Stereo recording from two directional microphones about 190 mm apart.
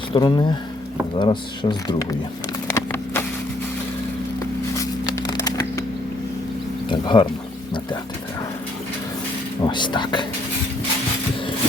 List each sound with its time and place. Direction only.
0.1 s speech: 25° left (ahead or behind)
2.7 s clip-clop: 10° left (ahead or behind)
4.8 s patter: 20° left (ahead or behind)
6.9 s speech: 25° left (ahead or behind)
9.6 s speech: 25° left (ahead or behind)